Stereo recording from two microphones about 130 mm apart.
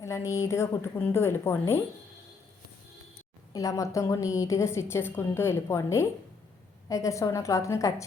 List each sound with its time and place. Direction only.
0.0 s a woman's voice: 25° left (ahead or behind)
3.5 s a woman's voice: 25° left (ahead or behind)